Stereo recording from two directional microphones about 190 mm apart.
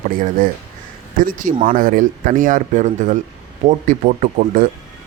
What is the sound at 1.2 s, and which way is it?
Speech, 45° right (ahead or behind).